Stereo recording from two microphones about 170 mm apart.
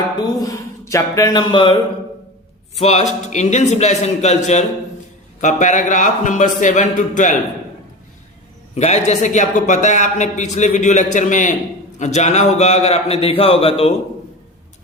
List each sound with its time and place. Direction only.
0.2 s a man's voice: 25° left (ahead or behind); by 7.3 s 50° left (ahead or behind)
8.7 s a man's voice: 40° left (ahead or behind)